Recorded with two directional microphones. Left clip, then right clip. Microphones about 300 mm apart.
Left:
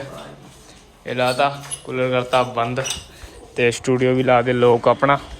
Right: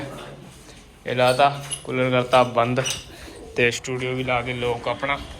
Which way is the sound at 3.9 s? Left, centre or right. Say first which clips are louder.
Left 9 dB; left.